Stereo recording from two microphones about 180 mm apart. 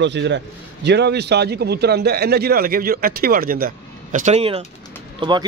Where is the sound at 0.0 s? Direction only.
80° right; by 4.6 s 35° right (ahead or behind).